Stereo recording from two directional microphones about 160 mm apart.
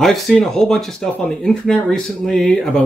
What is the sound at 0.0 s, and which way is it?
Speech, centre (ahead or behind).